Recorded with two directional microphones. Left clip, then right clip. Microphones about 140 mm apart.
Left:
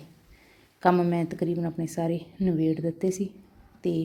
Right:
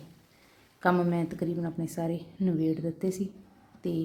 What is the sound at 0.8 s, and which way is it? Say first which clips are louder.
A woman's voice: left 4 dB; 15° left (ahead or behind).